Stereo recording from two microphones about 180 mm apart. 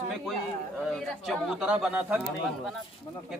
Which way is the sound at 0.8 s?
Centre (ahead or behind).